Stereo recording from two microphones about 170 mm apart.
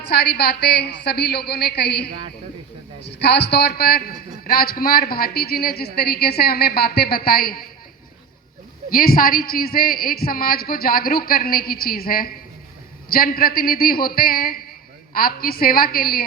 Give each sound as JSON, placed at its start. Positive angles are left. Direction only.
{"t": 0.1, "sound": "a woman's voice", "side_deg": 70}
{"t": 8.9, "sound": "a woman's voice", "side_deg": 60}